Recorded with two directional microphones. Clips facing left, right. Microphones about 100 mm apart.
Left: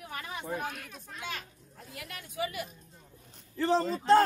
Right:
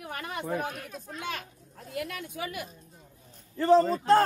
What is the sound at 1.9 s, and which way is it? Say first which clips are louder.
Speech: right 5 dB; 55° right (ahead or behind).